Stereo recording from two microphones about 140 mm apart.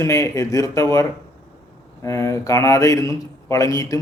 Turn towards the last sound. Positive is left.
turn(degrees=25)  # may be behind; listen again after turning